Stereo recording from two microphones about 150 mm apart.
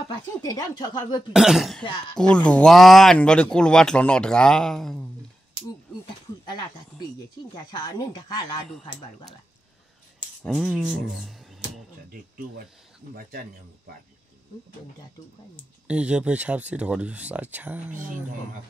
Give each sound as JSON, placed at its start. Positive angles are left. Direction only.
{"t": 0.3, "sound": "speech", "side_deg": 25}
{"t": 1.3, "sound": "speech", "side_deg": -5}
{"t": 6.4, "sound": "cricket", "side_deg": 30}
{"t": 7.7, "sound": "speech", "side_deg": 25}
{"t": 10.4, "sound": "speech", "side_deg": 0}
{"t": 15.9, "sound": "speech", "side_deg": -5}